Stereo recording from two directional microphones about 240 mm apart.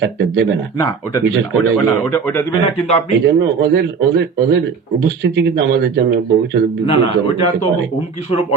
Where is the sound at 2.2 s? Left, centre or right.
Centre.